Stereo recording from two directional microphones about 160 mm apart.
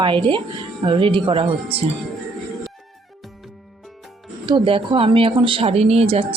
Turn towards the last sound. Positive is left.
turn(degrees=-40)  # may be behind; listen again after turning